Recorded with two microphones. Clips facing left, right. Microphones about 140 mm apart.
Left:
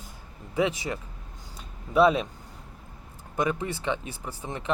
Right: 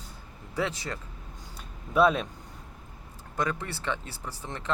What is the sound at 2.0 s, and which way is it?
Speech, 5° left (ahead or behind).